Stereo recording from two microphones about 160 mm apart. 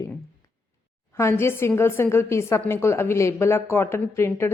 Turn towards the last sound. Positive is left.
turn(degrees=15)  # may be behind; listen again after turning